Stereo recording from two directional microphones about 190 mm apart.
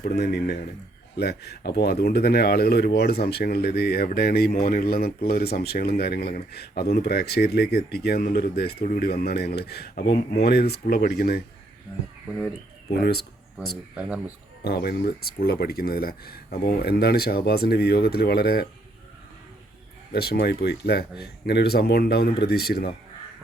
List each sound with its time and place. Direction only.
0.0 s speech: 55° left (ahead or behind)
12.9 s speech: 55° left (ahead or behind)
13.9 s speech: 5° right (ahead or behind)
14.6 s speech: 55° left (ahead or behind)
20.1 s speech: 55° left (ahead or behind)